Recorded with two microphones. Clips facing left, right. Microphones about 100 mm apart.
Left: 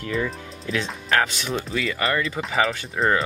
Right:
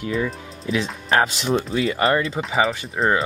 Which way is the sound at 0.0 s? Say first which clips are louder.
Right 2 dB; 5° right (ahead or behind).